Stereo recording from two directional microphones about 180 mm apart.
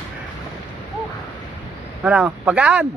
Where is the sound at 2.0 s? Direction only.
5° right (ahead or behind).